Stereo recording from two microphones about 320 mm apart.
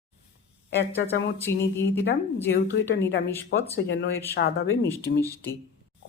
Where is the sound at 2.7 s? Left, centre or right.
Left.